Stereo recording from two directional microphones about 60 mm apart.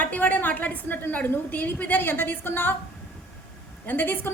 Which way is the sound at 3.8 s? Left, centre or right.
Left.